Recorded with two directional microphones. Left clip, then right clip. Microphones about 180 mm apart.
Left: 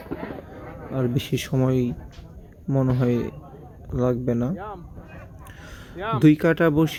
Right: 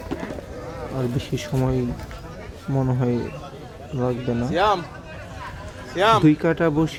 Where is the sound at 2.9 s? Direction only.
15° left (ahead or behind).